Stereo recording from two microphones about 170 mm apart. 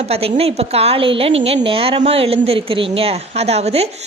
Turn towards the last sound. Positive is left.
turn(degrees=-40)  # may be behind; listen again after turning